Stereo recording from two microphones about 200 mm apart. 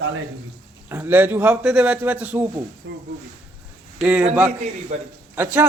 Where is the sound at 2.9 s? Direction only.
65° right (ahead or behind).